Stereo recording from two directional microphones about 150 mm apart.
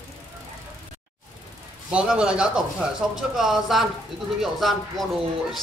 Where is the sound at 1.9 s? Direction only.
5° right (ahead or behind).